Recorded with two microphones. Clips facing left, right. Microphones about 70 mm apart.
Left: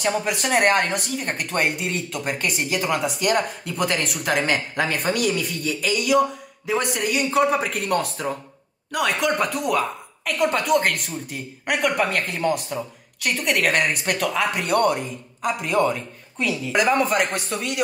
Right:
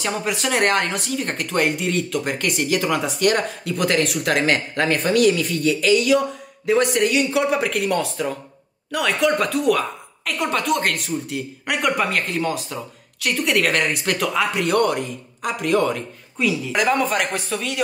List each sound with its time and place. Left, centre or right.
0.0 s speech: centre